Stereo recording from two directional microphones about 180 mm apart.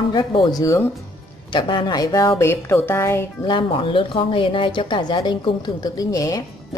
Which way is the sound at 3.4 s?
25° left (ahead or behind).